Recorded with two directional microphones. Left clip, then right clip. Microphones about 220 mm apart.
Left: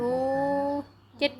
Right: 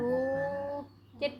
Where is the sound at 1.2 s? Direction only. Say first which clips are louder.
Left 6 dB; 50° left (ahead or behind).